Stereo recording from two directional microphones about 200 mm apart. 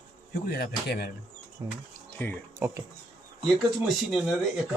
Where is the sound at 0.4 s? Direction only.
50° left (ahead or behind).